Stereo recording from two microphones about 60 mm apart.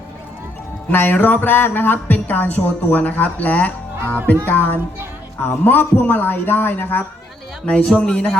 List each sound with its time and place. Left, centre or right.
0.9 s a man's voice: left
7.9 s speech: centre